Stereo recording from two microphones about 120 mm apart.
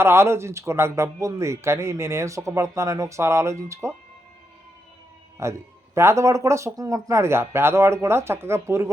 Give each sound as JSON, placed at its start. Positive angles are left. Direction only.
{"t": 0.0, "sound": "speech", "side_deg": -20}
{"t": 5.4, "sound": "speech", "side_deg": -25}